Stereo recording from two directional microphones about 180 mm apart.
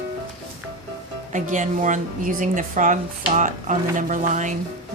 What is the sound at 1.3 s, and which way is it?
A woman's voice, 45° right (ahead or behind).